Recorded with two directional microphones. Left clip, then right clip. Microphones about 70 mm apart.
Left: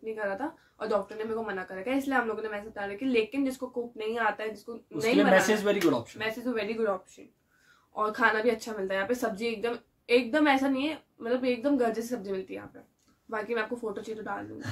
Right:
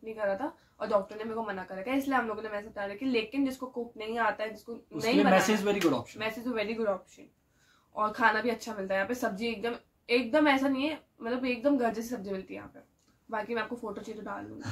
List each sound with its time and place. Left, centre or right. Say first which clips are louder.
0.0 s a woman's voice: right 1 dB; left
5.3 s speech: left 2 dB; right
6.1 s a woman's voice: left 1 dB; centre